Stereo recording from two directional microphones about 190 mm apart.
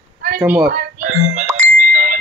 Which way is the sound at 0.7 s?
45° right (ahead or behind).